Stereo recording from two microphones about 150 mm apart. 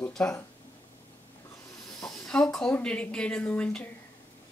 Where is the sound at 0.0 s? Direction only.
5° left (ahead or behind).